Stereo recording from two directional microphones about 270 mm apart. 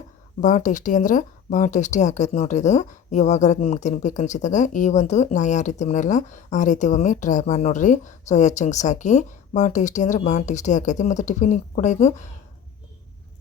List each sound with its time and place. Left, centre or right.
0.4 s speech: left